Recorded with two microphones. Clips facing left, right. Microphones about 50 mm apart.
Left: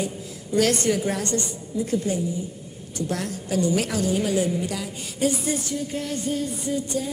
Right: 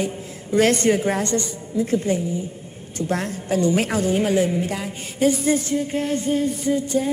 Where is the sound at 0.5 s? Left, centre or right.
Right.